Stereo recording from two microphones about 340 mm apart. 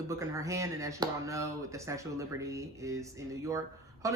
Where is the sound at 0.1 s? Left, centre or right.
Centre.